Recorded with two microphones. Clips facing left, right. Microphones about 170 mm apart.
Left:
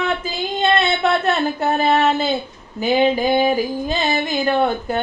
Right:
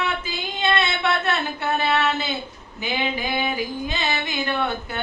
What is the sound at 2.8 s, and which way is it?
Female singing, 40° left (ahead or behind).